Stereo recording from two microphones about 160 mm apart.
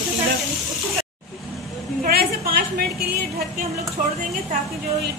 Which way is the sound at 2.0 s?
70° right (ahead or behind).